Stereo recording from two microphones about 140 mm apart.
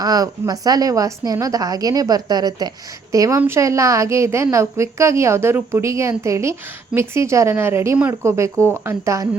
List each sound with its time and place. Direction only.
0.0 s a woman's voice: 25° right (ahead or behind)